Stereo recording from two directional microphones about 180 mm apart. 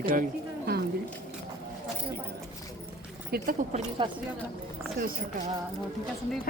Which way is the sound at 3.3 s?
50° right (ahead or behind).